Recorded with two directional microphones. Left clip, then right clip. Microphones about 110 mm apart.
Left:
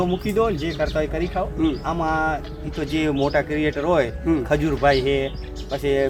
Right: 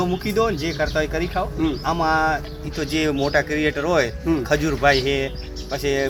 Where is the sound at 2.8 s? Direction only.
20° left (ahead or behind).